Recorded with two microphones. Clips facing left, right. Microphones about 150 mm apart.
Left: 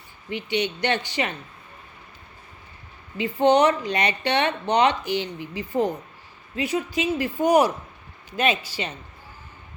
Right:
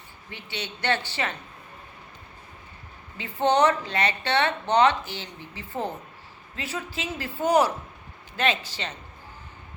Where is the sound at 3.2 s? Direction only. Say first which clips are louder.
Left 4 dB; 15° left (ahead or behind).